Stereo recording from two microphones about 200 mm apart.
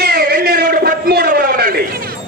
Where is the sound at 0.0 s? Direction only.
55° right (ahead or behind).